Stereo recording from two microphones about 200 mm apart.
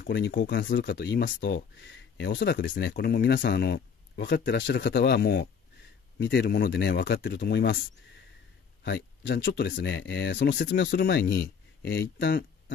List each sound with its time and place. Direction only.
0.0 s speech: 60° left (ahead or behind)
8.8 s speech: 60° left (ahead or behind)